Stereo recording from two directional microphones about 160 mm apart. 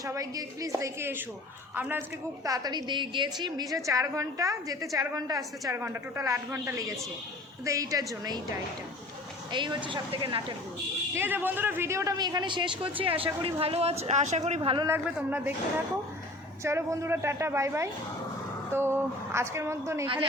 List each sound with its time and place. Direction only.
0.0 s a woman's voice: 20° right (ahead or behind)
11.1 s a woman's voice: 10° right (ahead or behind); by 14.8 s 35° right (ahead or behind)
14.8 s speech: 10° right (ahead or behind)
16.6 s speech: 15° right (ahead or behind)